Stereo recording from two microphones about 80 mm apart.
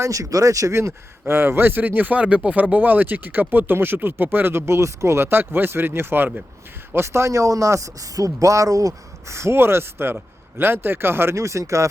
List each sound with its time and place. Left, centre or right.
0.0 s speech: right